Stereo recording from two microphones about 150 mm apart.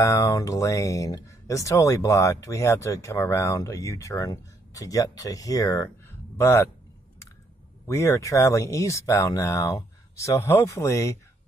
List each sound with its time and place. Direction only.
0.0 s speech: 20° left (ahead or behind)
7.8 s speech: 20° left (ahead or behind)